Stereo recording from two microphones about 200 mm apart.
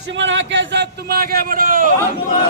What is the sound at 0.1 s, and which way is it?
A man's voice, 65° right (ahead or behind).